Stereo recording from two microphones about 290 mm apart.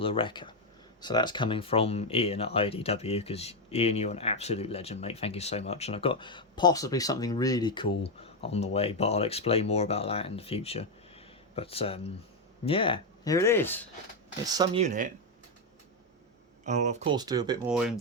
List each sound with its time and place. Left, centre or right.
0.0 s speech: centre
14.4 s speech: centre
16.6 s speech: right
17.7 s speech: centre